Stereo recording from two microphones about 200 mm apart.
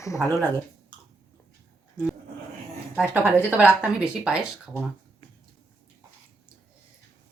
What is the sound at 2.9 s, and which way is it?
Speech, 5° right (ahead or behind).